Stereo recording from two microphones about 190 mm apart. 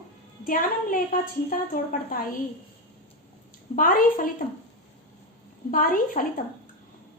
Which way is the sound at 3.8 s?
45° left (ahead or behind).